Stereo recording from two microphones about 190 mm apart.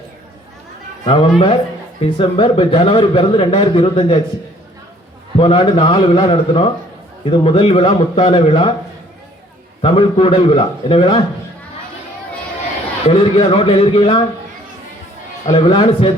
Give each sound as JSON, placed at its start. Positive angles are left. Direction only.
{"t": 1.0, "sound": "speech", "side_deg": 25}
{"t": 5.4, "sound": "speech", "side_deg": 25}
{"t": 9.8, "sound": "speech", "side_deg": 30}
{"t": 13.1, "sound": "speech", "side_deg": 30}
{"t": 15.4, "sound": "speech", "side_deg": 25}